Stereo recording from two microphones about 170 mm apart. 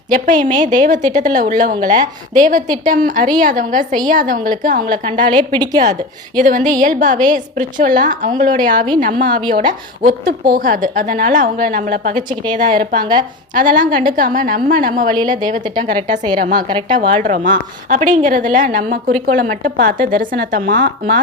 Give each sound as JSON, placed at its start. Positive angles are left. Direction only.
{"t": 0.1, "sound": "a woman's voice", "side_deg": -50}
{"t": 5.3, "sound": "a woman's voice", "side_deg": -25}
{"t": 6.3, "sound": "a woman's voice", "side_deg": -50}